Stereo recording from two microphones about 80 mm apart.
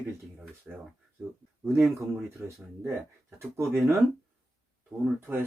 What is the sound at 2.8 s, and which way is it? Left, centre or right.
Speech, right.